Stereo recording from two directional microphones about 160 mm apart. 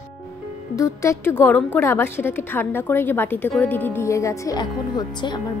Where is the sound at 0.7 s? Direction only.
20° left (ahead or behind).